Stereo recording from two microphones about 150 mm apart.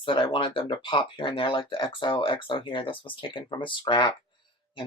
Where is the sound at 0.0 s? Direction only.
35° left (ahead or behind).